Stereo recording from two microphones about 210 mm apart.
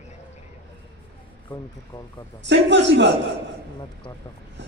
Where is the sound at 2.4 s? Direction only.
60° right (ahead or behind).